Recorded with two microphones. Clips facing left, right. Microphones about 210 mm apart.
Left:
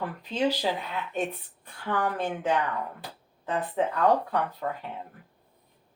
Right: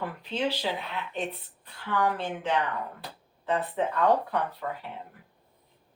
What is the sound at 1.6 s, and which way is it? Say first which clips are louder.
Speech: right 1 dB; 45° left (ahead or behind).